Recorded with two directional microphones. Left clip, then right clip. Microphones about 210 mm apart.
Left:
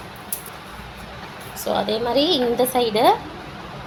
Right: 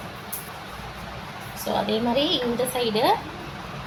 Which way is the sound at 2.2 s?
35° left (ahead or behind).